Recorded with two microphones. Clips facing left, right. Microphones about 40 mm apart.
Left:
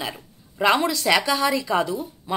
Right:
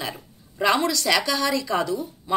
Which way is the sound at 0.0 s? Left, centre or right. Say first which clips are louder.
Left 1 dB; centre.